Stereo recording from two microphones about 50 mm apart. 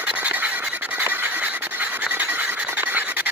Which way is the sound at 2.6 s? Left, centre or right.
Right.